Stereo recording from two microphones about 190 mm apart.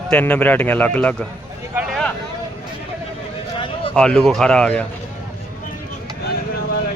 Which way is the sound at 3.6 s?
30° left (ahead or behind).